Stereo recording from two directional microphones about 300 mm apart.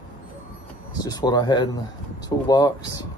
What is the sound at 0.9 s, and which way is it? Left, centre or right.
Speech, centre.